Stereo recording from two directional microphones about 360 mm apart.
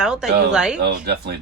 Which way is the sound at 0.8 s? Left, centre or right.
Right.